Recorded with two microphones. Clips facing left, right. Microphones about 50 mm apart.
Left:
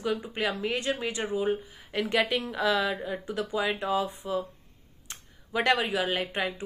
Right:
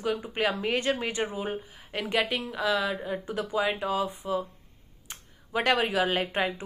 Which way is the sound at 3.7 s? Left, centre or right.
Centre.